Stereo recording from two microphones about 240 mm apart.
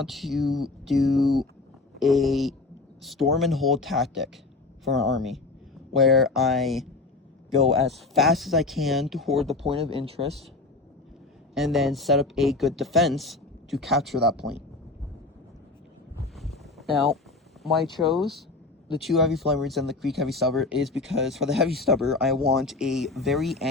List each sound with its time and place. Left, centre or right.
0.0 s speech: centre
9.6 s speech: right
11.5 s speech: centre
16.3 s boat: centre
17.6 s speech: centre